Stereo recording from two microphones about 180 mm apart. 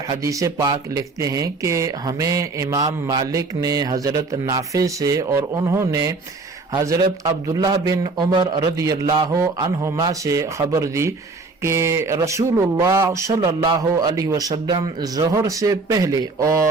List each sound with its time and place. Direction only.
0.1 s a man's voice: 20° right (ahead or behind)